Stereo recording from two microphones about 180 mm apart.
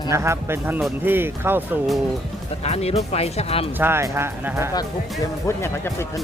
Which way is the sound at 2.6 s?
35° left (ahead or behind).